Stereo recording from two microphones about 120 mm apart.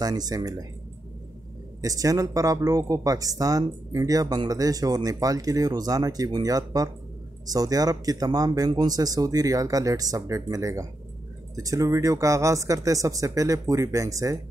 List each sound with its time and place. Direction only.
0.0 s speech: 35° right (ahead or behind)
1.8 s speech: 30° right (ahead or behind)